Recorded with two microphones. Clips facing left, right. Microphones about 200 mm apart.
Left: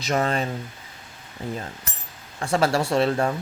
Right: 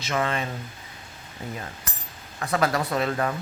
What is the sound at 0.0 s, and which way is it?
Speech, 35° left (ahead or behind).